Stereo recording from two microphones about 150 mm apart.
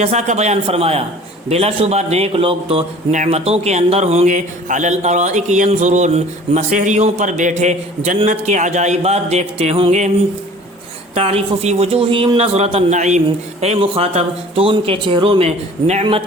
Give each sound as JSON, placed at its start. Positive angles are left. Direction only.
{"t": 0.0, "sound": "speech", "side_deg": -50}
{"t": 11.1, "sound": "speech", "side_deg": -40}